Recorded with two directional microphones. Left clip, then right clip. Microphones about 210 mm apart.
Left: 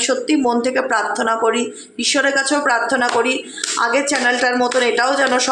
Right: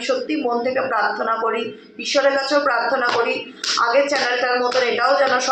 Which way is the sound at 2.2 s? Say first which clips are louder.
Right 1 dB; 45° left (ahead or behind).